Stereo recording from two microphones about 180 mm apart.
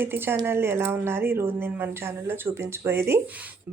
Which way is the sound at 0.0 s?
10° right (ahead or behind).